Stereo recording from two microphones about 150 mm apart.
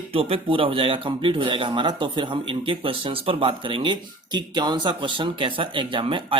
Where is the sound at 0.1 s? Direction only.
40° right (ahead or behind).